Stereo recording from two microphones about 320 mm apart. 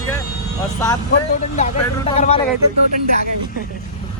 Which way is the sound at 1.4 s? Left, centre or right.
Left.